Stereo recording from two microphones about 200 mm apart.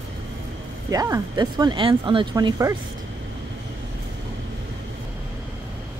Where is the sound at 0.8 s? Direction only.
15° right (ahead or behind).